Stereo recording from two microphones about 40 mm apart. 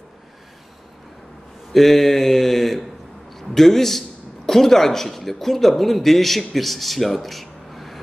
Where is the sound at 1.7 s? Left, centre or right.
Centre.